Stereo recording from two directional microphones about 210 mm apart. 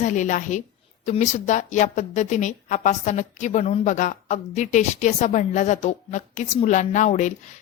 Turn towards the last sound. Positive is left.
turn(degrees=35)  # may be behind; listen again after turning